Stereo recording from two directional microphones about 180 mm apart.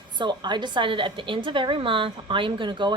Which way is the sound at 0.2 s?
25° right (ahead or behind).